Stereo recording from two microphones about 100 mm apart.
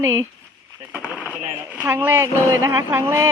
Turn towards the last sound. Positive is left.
turn(degrees=-30)  # may be behind; listen again after turning